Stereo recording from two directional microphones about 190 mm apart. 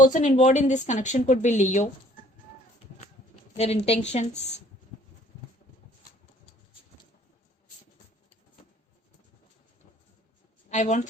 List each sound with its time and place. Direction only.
0.0 s speech: 40° left (ahead or behind)
3.6 s speech: 35° left (ahead or behind)
10.7 s speech: 40° left (ahead or behind)